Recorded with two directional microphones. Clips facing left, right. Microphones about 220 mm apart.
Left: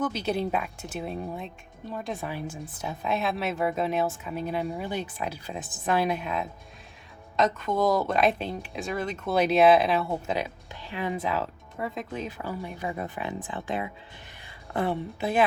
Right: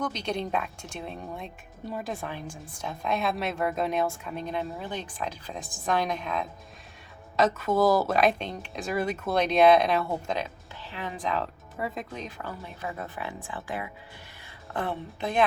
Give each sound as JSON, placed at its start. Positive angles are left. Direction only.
{"t": 0.0, "sound": "speech", "side_deg": 5}
{"t": 1.8, "sound": "a woman's voice", "side_deg": -10}
{"t": 2.2, "sound": "speech", "side_deg": 5}
{"t": 7.3, "sound": "speech", "side_deg": -5}
{"t": 9.3, "sound": "speech", "side_deg": 5}